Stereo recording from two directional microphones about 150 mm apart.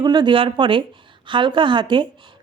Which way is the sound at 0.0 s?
30° right (ahead or behind).